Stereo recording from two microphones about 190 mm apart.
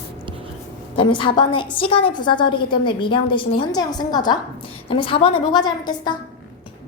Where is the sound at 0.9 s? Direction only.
25° left (ahead or behind).